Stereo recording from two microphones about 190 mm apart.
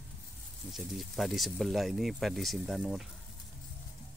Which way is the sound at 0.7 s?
Centre (ahead or behind).